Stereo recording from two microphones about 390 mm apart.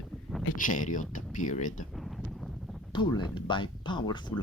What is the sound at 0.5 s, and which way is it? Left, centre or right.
Speech, centre.